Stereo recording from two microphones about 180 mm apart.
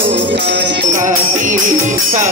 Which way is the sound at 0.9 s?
45° right (ahead or behind).